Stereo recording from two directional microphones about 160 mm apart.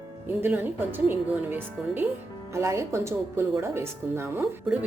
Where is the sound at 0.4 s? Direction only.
10° right (ahead or behind).